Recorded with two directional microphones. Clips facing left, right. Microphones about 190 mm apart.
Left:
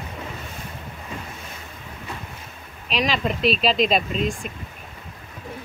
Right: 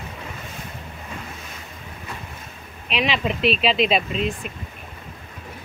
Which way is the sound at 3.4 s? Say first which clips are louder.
Even; 40° left (ahead or behind).